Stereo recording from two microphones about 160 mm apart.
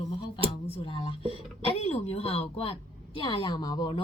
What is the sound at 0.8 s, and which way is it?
A woman's voice, 30° left (ahead or behind).